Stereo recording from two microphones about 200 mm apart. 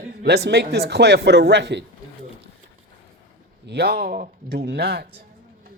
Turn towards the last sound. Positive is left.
turn(degrees=-50)  # may be behind; listen again after turning